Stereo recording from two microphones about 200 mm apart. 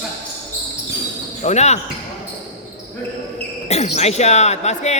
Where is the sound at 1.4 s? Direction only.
35° left (ahead or behind).